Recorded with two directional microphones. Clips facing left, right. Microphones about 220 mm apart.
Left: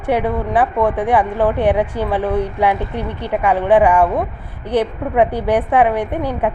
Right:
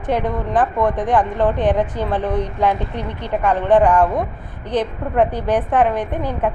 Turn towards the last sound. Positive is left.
turn(degrees=10)  # may be behind; listen again after turning